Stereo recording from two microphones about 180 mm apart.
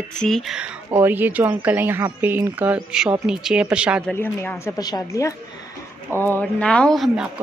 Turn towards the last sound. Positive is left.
turn(degrees=0)  # may be behind; listen again after turning